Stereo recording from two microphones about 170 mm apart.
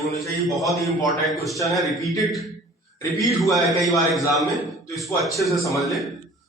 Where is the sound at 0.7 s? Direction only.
20° left (ahead or behind).